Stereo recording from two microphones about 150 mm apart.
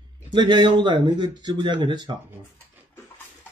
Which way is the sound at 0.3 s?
30° right (ahead or behind).